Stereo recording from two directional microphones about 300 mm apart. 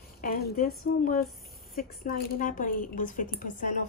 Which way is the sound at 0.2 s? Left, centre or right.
Left.